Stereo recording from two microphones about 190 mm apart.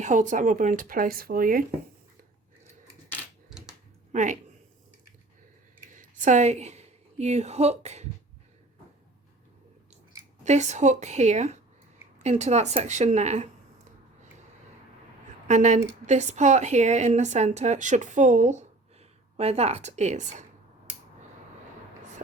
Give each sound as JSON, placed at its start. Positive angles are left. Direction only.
{"t": 0.0, "sound": "speech", "side_deg": -40}
{"t": 4.1, "sound": "speech", "side_deg": -40}
{"t": 6.0, "sound": "a woman's voice", "side_deg": -40}
{"t": 10.4, "sound": "a woman's voice", "side_deg": -35}
{"t": 15.4, "sound": "a woman's voice", "side_deg": -40}